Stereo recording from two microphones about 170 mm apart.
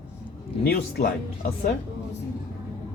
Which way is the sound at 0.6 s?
65° left (ahead or behind).